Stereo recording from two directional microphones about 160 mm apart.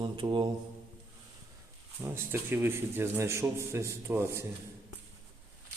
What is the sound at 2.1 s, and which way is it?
A man's voice, 15° right (ahead or behind).